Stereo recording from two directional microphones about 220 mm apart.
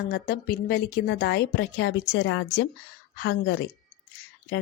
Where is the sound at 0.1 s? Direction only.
45° left (ahead or behind).